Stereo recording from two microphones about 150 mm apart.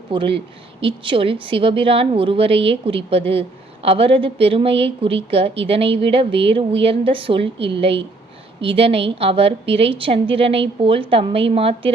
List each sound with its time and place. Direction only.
0.1 s a woman's voice: 35° right (ahead or behind)